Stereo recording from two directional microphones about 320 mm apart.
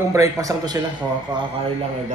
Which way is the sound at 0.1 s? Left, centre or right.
Centre.